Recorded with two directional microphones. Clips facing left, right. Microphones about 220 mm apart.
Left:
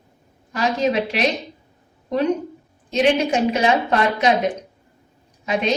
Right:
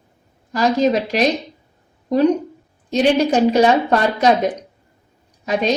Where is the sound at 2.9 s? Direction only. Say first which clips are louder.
Right 3 dB; 35° right (ahead or behind).